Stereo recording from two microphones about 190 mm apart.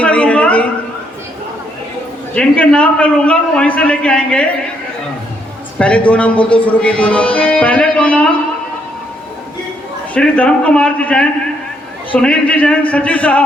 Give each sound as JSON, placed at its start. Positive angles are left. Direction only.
{"t": 0.0, "sound": "a sound", "side_deg": 5}
{"t": 2.3, "sound": "speech", "side_deg": 5}
{"t": 6.1, "sound": "speech", "side_deg": 5}
{"t": 10.2, "sound": "a man's voice", "side_deg": 5}